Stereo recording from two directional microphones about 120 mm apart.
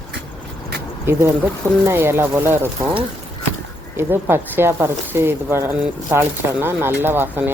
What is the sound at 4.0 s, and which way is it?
Speech, 20° right (ahead or behind).